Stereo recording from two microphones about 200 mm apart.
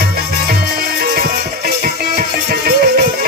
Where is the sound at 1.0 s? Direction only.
50° right (ahead or behind).